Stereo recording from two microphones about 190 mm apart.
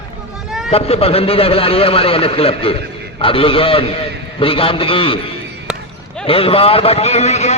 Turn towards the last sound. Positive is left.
turn(degrees=35)  # may be behind; listen again after turning